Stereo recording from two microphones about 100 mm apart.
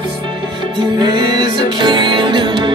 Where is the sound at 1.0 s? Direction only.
45° right (ahead or behind).